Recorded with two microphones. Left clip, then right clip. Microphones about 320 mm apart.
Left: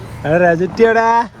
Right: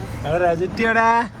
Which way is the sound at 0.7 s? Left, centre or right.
Centre.